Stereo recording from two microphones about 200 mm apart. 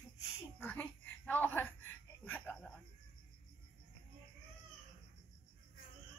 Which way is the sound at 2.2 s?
5° left (ahead or behind).